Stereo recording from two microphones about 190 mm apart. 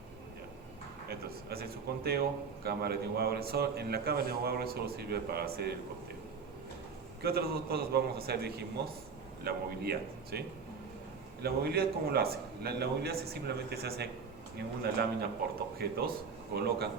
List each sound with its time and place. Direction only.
1.0 s a man's voice: 55° right (ahead or behind)
7.2 s a man's voice: 55° right (ahead or behind)
11.4 s a man's voice: 55° right (ahead or behind)